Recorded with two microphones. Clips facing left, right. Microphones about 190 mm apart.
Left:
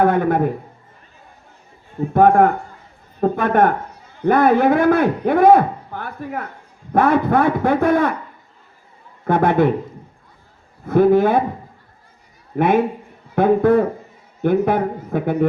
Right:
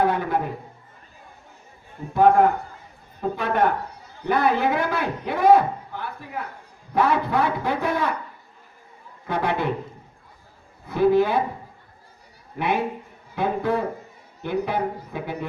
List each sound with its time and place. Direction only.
0.0 s a man's voice: 50° left (ahead or behind)
2.1 s a man's voice: 55° left (ahead or behind)
9.2 s a man's voice: 50° left (ahead or behind)
10.8 s a man's voice: 50° left (ahead or behind)
12.5 s a man's voice: 50° left (ahead or behind)